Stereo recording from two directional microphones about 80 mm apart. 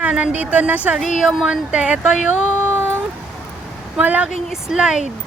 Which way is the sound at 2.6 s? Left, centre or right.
Right.